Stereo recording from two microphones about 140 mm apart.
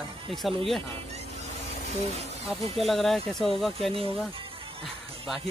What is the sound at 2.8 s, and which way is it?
Speech, centre (ahead or behind).